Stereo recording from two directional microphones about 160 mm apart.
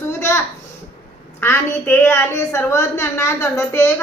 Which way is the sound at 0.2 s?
15° left (ahead or behind).